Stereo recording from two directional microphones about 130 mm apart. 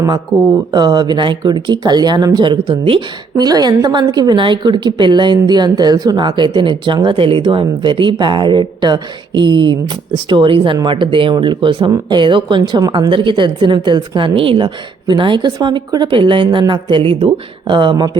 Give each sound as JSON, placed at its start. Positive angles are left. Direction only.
{"t": 0.7, "sound": "speech", "side_deg": -35}